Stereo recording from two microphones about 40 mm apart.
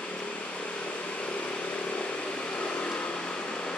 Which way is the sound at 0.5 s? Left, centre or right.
Left.